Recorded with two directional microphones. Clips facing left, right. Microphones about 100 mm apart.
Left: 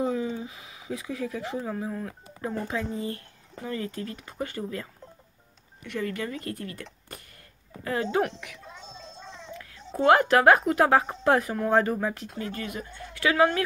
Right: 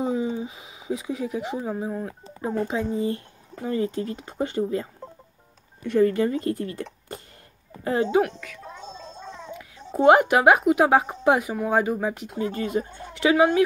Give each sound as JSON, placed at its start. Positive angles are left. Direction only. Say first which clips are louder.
{"t": 0.0, "sound": "speech", "louder": "right 3 dB", "side_deg": -20}
{"t": 5.9, "sound": "speech", "louder": "right 11 dB", "side_deg": -30}
{"t": 8.7, "sound": "gargling", "louder": "right 5 dB", "side_deg": -50}
{"t": 9.5, "sound": "a sound", "louder": "right 3 dB", "side_deg": -15}
{"t": 9.9, "sound": "speech", "louder": "right 3 dB", "side_deg": -20}